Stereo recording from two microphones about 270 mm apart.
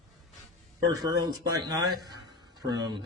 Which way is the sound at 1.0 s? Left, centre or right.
Centre.